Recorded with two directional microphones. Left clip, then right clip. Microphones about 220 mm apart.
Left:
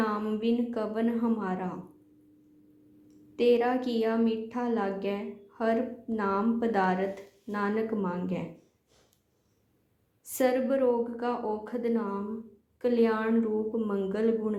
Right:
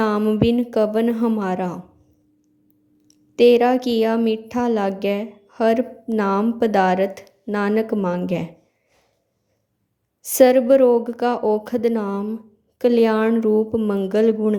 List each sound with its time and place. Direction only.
0.0 s a woman's voice: 45° right (ahead or behind)
3.3 s a woman's voice: 50° right (ahead or behind)
10.2 s a woman's voice: 50° right (ahead or behind)